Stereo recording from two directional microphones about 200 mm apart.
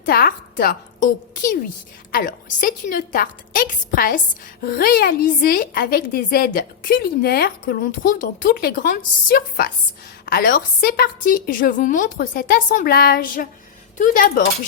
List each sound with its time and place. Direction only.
0.0 s a woman's voice: 50° left (ahead or behind)